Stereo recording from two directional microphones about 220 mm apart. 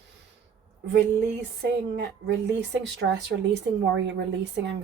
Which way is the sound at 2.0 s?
50° right (ahead or behind).